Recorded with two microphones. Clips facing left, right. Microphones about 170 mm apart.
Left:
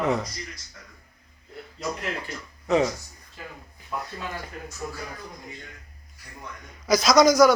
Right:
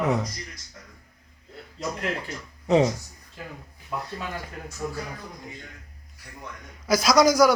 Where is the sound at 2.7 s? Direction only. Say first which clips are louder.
Right 2 dB; 30° right (ahead or behind).